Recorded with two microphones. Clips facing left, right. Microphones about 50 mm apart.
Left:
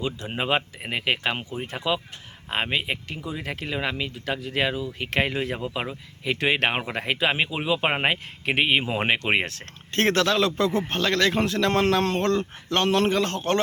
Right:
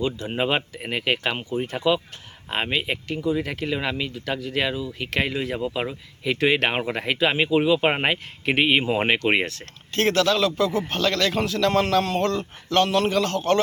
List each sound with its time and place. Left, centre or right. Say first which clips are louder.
0.3 s speech: left 2 dB; centre
9.9 s speech: right 1 dB; left